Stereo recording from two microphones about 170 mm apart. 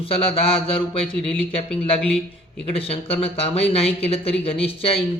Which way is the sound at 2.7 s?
35° left (ahead or behind).